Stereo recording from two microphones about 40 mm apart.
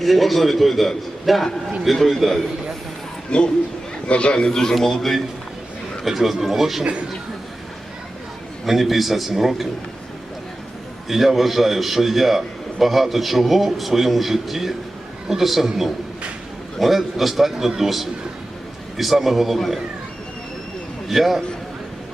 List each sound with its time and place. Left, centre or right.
0.0 s a man's voice: centre
3.2 s a man's voice: left
4.4 s a man's voice: centre
6.1 s a man's voice: centre
8.6 s a man's voice: centre
11.1 s a man's voice: centre
21.1 s a man's voice: centre